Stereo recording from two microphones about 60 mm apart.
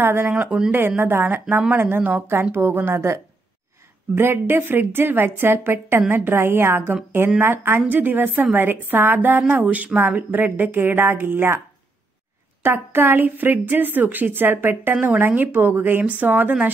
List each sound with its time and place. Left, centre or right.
0.0 s a woman's voice: right
0.3 s a woman's voice: right
9.6 s a woman's voice: right
12.6 s a woman's voice: right